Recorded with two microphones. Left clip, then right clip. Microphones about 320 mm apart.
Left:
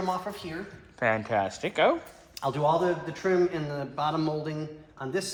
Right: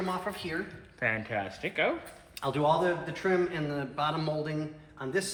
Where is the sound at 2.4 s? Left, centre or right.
Left.